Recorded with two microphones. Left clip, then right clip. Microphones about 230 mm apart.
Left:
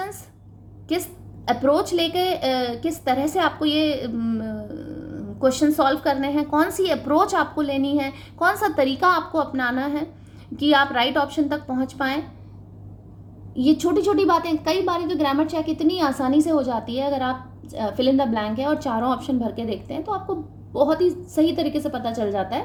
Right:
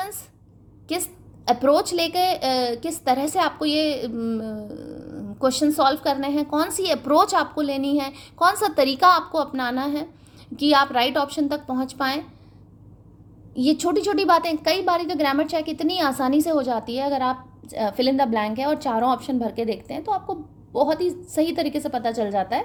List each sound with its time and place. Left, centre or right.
1.6 s a woman's voice: right
13.6 s a woman's voice: right
21.3 s a woman's voice: right